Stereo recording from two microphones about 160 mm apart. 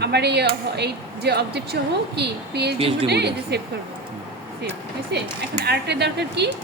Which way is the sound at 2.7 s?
35° right (ahead or behind).